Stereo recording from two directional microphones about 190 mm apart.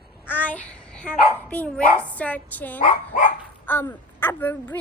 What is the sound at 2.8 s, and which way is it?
Speech, 45° left (ahead or behind).